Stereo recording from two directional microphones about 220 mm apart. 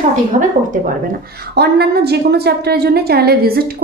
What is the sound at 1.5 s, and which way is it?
A woman's voice, 45° right (ahead or behind).